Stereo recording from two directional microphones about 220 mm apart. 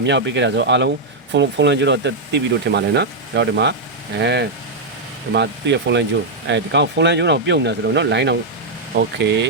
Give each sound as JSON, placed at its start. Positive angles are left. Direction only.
{"t": 0.0, "sound": "speech", "side_deg": -55}